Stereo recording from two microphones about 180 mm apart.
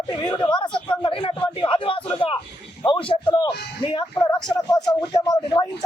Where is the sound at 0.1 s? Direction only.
25° left (ahead or behind).